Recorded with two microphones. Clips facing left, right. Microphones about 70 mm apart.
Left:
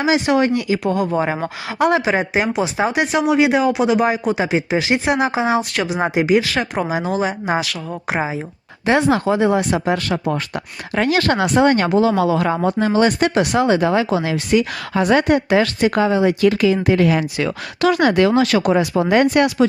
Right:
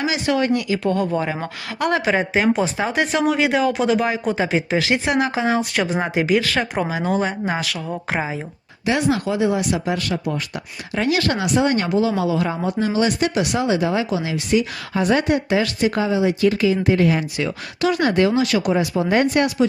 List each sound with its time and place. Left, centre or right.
0.0 s speech: left
0.9 s speech: centre
5.5 s speech: centre
6.0 s speech: centre
6.4 s speech: centre
8.9 s speech: left
12.6 s speech: left
18.3 s speech: left
18.7 s speech: left